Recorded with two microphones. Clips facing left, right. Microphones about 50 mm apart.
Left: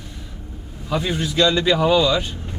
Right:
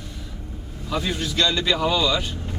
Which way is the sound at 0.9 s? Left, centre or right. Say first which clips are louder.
Left 3 dB; centre.